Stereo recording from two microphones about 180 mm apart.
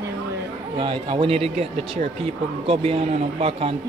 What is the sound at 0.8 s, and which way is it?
Speech, 30° right (ahead or behind).